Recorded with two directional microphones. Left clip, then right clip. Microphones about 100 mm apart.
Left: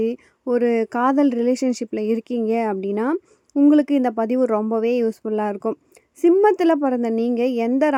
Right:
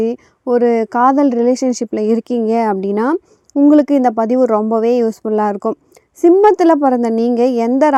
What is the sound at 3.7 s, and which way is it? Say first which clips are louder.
Speech: right 7 dB; 60° right (ahead or behind).